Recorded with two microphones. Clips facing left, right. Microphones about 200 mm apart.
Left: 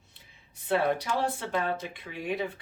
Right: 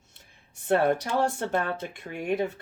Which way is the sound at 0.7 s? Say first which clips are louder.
Right 3 dB; 45° right (ahead or behind).